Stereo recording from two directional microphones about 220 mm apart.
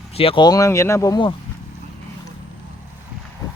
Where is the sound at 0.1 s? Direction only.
25° left (ahead or behind).